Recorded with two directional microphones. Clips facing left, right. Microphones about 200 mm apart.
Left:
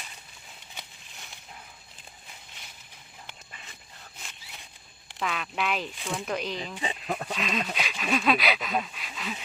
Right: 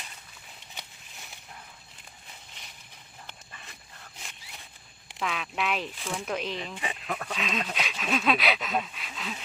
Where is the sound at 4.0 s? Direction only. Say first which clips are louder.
Even; centre (ahead or behind).